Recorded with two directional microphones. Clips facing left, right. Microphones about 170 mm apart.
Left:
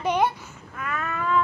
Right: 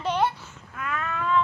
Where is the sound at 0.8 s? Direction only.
5° left (ahead or behind).